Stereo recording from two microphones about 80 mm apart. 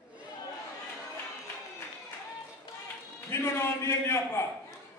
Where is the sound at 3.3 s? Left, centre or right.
Left.